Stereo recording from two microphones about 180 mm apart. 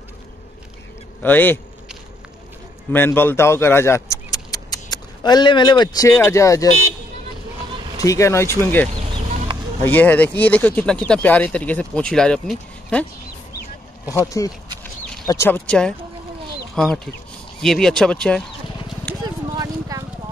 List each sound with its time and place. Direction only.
1.2 s speech: 10° left (ahead or behind)
2.9 s speech: 10° left (ahead or behind)
8.0 s speech: 15° left (ahead or behind)
9.8 s speech: 10° left (ahead or behind)
14.0 s speech: 20° left (ahead or behind)
19.2 s clip-clop: 20° right (ahead or behind)